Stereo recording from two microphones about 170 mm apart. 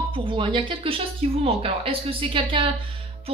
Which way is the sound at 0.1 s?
30° right (ahead or behind).